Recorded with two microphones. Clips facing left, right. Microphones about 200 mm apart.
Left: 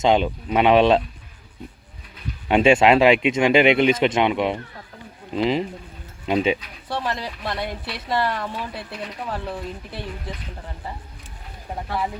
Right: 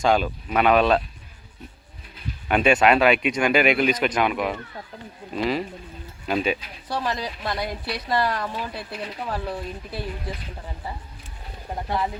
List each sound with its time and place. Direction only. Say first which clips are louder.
0.0 s speech: left 2 dB; 20° left (ahead or behind)
2.5 s speech: left 3 dB; 25° left (ahead or behind)
6.8 s speech: even; centre (ahead or behind)